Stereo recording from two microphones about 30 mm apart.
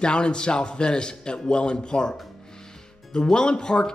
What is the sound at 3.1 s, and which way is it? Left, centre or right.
Speech, left.